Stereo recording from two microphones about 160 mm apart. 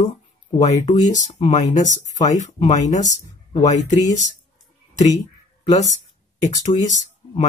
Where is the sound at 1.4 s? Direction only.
45° left (ahead or behind).